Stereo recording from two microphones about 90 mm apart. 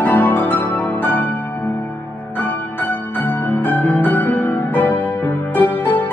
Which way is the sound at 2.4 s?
20° left (ahead or behind).